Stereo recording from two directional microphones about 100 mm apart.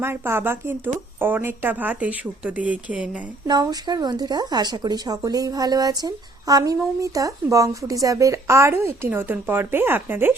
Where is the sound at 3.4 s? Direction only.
40° right (ahead or behind).